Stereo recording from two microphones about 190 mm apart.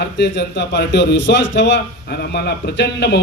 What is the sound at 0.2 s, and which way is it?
A man's voice, 65° left (ahead or behind).